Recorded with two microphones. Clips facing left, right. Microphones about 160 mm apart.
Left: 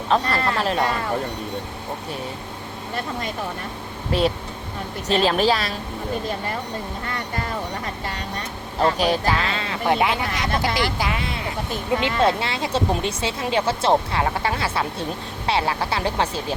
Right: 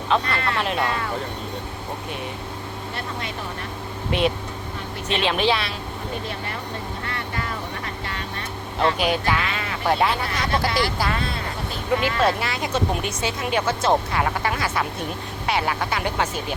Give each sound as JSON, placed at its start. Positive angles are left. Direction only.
{"t": 0.1, "sound": "speech", "side_deg": 35}
{"t": 4.1, "sound": "speech", "side_deg": 35}
{"t": 8.8, "sound": "speech", "side_deg": 35}